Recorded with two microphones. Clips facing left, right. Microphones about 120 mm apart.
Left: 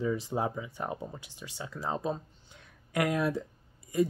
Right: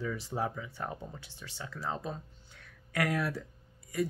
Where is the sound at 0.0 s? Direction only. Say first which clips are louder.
Left 4 dB; 20° left (ahead or behind).